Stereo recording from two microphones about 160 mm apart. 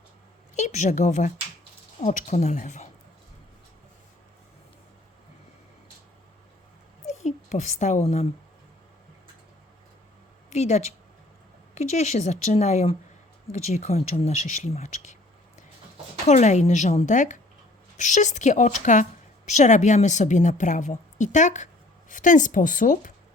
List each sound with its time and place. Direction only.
0.5 s a woman's voice: 45° left (ahead or behind)
7.1 s a woman's voice: 45° left (ahead or behind)
10.5 s a woman's voice: 45° left (ahead or behind)
16.2 s a woman's voice: 45° left (ahead or behind)